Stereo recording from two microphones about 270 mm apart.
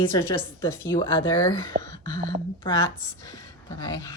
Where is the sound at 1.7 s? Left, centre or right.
Right.